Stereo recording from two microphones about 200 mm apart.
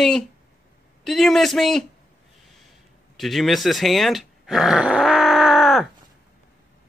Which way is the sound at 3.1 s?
Centre (ahead or behind).